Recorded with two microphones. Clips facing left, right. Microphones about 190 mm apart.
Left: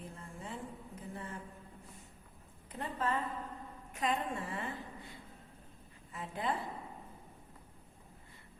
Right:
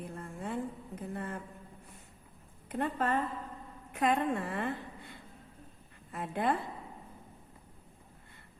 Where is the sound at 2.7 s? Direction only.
60° right (ahead or behind).